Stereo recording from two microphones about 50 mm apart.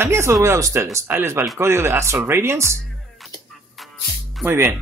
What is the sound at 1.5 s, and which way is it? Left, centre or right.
Speech, right.